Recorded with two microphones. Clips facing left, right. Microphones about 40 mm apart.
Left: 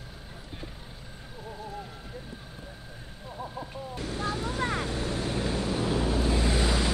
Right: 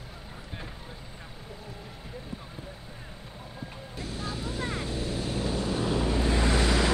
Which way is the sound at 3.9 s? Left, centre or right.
Left.